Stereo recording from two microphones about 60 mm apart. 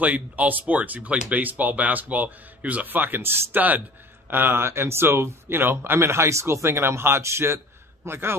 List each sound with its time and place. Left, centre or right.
0.0 s speech: right